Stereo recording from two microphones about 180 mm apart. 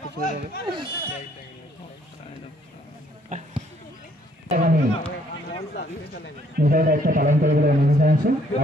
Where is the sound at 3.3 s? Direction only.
45° right (ahead or behind).